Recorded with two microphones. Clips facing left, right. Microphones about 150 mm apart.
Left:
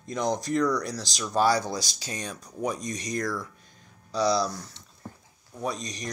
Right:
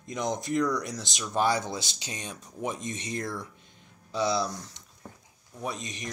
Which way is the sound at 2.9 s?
40° left (ahead or behind).